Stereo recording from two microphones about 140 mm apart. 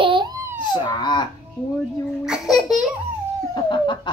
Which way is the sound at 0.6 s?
30° left (ahead or behind).